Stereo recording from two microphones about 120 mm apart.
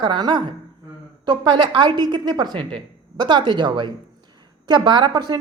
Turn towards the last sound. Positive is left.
turn(degrees=-35)  # may be behind; listen again after turning